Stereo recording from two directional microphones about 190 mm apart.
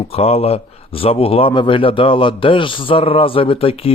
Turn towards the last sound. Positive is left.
turn(degrees=30)  # may be behind; listen again after turning